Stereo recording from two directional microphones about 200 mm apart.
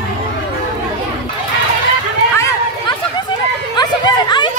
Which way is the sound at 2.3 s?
15° left (ahead or behind).